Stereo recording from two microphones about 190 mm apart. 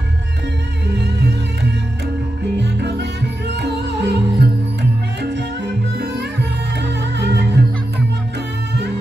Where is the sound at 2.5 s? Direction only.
65° right (ahead or behind).